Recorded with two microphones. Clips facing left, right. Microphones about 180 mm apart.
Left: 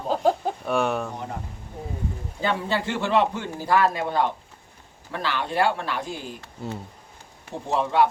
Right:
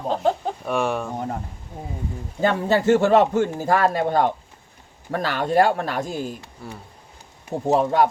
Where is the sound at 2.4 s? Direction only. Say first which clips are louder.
Right 7 dB; 45° right (ahead or behind).